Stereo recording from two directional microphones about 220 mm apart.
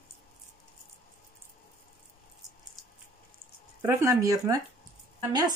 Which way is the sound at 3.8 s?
15° right (ahead or behind).